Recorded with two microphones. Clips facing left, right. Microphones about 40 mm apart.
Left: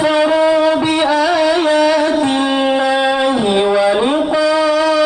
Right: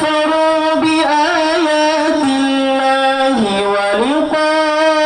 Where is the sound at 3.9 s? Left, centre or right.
Left.